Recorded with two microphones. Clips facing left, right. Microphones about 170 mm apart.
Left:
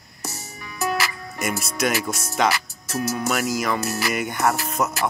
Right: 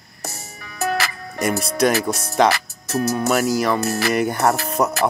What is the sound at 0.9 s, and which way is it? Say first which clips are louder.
Music: right 2 dB; 35° right (ahead or behind).